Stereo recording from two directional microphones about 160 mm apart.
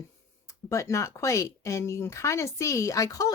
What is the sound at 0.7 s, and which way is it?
Speech, 20° left (ahead or behind).